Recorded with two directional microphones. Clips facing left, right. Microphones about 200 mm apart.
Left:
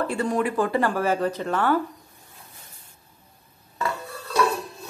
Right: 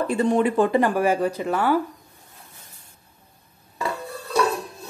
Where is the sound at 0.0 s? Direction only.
20° right (ahead or behind).